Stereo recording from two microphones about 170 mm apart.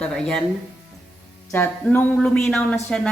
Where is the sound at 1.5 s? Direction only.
10° left (ahead or behind).